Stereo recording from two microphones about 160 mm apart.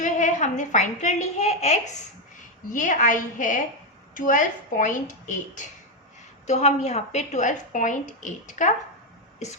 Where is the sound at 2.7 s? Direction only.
55° left (ahead or behind).